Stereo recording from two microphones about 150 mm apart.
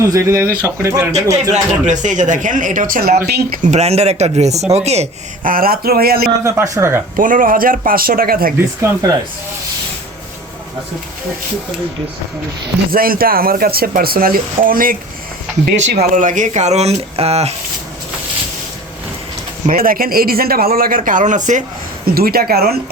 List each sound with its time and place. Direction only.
0.1 s speech: 20° right (ahead or behind)
1.5 s speech: 55° right (ahead or behind)
5.4 s speech: 70° right (ahead or behind); by 6.3 s 90° right
6.4 s speech: 20° right (ahead or behind)
7.2 s speech: 65° right (ahead or behind)
8.5 s speech: 15° right (ahead or behind)
12.9 s speech: 75° right (ahead or behind)
15.6 s speech: 85° right; by 17.5 s 45° right (ahead or behind)
19.7 s speech: 75° right (ahead or behind); by 21.6 s 55° right (ahead or behind)
22.0 s speech: 90° right